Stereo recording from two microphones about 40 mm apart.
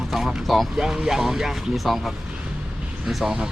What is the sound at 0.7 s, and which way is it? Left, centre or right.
Speech, centre.